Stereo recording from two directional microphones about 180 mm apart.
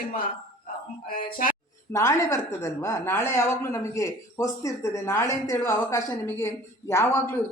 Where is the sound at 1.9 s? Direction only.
15° left (ahead or behind).